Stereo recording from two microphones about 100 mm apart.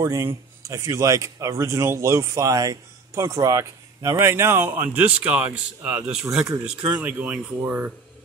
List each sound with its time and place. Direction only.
0.0 s speech: 30° right (ahead or behind)